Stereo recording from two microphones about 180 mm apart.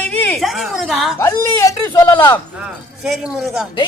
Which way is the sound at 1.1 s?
15° left (ahead or behind).